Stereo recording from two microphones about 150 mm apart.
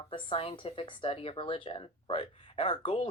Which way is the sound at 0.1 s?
35° left (ahead or behind).